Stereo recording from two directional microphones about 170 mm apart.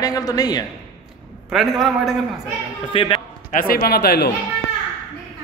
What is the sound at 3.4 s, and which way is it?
Speech, 60° left (ahead or behind).